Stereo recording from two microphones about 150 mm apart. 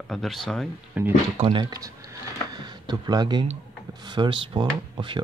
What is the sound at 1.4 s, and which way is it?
Speech, 30° right (ahead or behind).